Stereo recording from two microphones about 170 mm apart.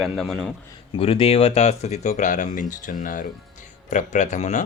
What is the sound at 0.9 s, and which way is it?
Speech, 30° left (ahead or behind).